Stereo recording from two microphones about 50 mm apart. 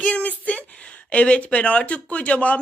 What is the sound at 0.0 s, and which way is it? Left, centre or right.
Speech, left.